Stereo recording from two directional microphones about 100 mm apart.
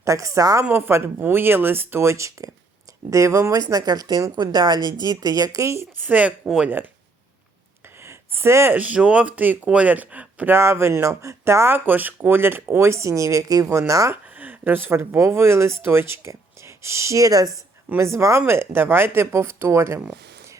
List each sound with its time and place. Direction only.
0.0 s a woman's voice: 30° right (ahead or behind)
0.6 s a woman's voice: 20° right (ahead or behind)
8.0 s speech: 25° right (ahead or behind)
14.3 s speech: 15° right (ahead or behind); by 17.6 s 35° right (ahead or behind)
17.8 s speech: 25° right (ahead or behind)